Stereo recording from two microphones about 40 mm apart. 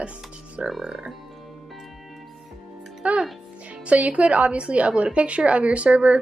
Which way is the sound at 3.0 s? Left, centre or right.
Right.